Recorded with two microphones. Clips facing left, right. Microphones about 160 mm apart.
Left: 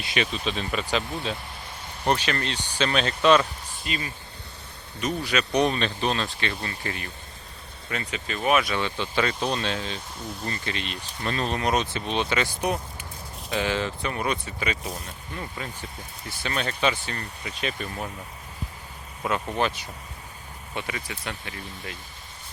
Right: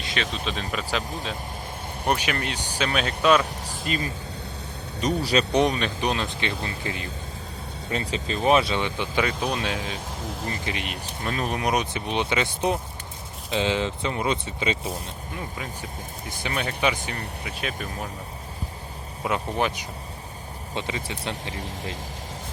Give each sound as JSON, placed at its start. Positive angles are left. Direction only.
{"t": 0.0, "sound": "speech", "side_deg": 10}
{"t": 2.0, "sound": "speech", "side_deg": -10}
{"t": 3.8, "sound": "speech", "side_deg": -40}
{"t": 5.5, "sound": "speech", "side_deg": -15}
{"t": 7.9, "sound": "speech", "side_deg": -30}
{"t": 8.8, "sound": "speech", "side_deg": -15}
{"t": 15.4, "sound": "speech", "side_deg": -10}
{"t": 19.2, "sound": "speech", "side_deg": -15}